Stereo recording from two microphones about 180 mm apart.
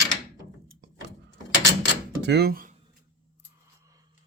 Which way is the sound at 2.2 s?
65° right (ahead or behind).